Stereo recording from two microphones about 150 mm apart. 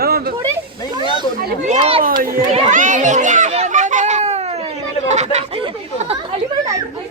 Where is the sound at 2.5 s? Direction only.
50° right (ahead or behind).